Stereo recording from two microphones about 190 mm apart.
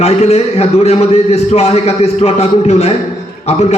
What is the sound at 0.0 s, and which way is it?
A man's voice, 35° left (ahead or behind).